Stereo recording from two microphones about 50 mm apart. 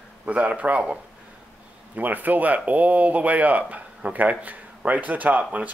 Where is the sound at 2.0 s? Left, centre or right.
Right.